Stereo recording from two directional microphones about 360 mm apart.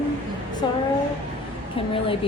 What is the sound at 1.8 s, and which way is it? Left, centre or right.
Speech, centre.